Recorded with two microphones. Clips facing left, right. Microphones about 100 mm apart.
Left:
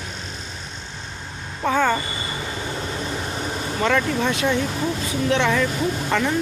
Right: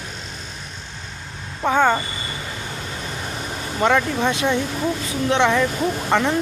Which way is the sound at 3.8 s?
20° right (ahead or behind).